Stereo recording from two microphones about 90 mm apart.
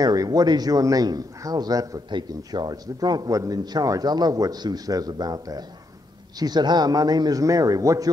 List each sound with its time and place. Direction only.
0.0 s a man's voice: 45° right (ahead or behind)
2.0 s a man's voice: 55° right (ahead or behind); by 8.1 s 40° right (ahead or behind)